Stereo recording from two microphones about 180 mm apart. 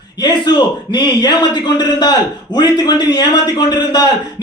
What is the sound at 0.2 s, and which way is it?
A man's voice, 25° left (ahead or behind).